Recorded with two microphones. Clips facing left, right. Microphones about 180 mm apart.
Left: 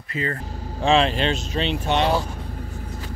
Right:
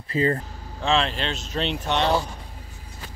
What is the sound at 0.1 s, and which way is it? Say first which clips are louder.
Speech: right 5 dB; 35° right (ahead or behind).